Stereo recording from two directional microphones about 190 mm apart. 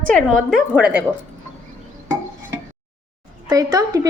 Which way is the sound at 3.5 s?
20° right (ahead or behind).